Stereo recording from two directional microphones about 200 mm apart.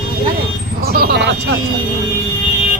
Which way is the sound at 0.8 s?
50° right (ahead or behind).